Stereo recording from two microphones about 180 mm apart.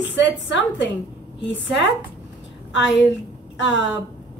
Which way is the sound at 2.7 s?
80° left.